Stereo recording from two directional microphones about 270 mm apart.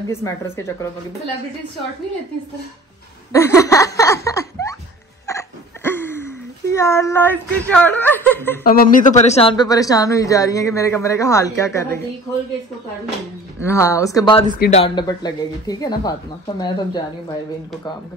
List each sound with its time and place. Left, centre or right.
0.1 s speech: centre
3.3 s laughter: centre
5.3 s hiccup: centre
5.9 s speech: centre
8.6 s speech: left; by 12.0 s centre
13.6 s speech: centre